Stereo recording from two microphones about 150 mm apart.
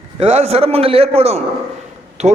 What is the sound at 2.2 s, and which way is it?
Speech, 20° right (ahead or behind).